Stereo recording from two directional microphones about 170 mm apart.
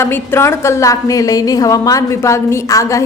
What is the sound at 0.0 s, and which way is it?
A woman's voice, 15° left (ahead or behind).